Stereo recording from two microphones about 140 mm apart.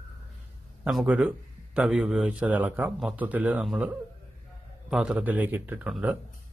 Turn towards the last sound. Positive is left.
turn(degrees=-10)  # may be behind; listen again after turning